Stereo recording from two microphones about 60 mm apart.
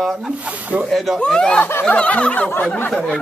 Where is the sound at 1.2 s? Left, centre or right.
Centre.